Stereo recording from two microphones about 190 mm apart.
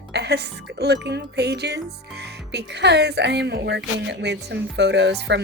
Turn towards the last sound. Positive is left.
turn(degrees=-65)  # may be behind; listen again after turning